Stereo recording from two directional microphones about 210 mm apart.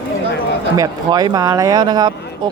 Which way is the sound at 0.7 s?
15° right (ahead or behind).